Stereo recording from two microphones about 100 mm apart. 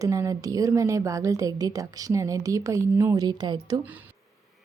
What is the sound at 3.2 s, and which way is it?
Speech, 45° right (ahead or behind).